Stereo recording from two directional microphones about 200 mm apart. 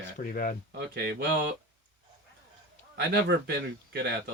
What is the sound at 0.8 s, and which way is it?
Speech, 50° right (ahead or behind).